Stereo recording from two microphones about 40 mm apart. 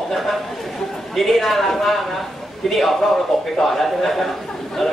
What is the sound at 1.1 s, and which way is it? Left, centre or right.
A man's voice, centre.